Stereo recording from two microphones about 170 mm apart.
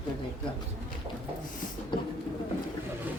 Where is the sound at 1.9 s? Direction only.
30° left (ahead or behind).